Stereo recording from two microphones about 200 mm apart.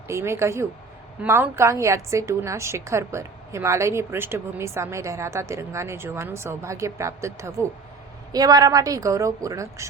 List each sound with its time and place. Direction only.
0.1 s a woman's voice: 15° right (ahead or behind)